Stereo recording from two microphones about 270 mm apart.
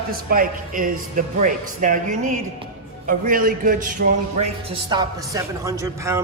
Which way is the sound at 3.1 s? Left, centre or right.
Right.